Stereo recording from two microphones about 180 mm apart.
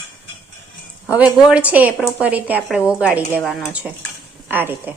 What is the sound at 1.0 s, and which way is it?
A woman's voice, 5° right (ahead or behind).